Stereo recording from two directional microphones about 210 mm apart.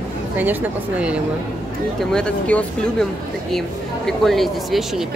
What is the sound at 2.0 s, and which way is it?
Speech, 5° left (ahead or behind).